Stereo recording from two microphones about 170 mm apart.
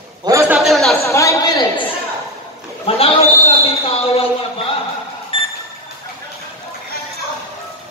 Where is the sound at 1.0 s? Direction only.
20° left (ahead or behind).